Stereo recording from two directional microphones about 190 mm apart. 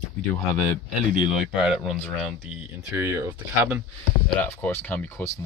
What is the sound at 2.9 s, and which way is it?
Speech, 15° right (ahead or behind).